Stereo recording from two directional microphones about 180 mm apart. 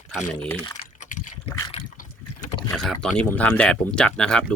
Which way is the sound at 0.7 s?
45° left (ahead or behind).